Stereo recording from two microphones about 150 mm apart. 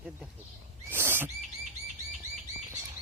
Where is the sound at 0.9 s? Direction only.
15° right (ahead or behind).